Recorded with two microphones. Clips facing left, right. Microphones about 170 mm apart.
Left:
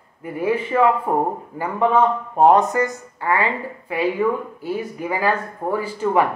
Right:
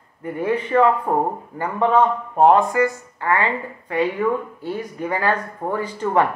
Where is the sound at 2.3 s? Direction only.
20° left (ahead or behind).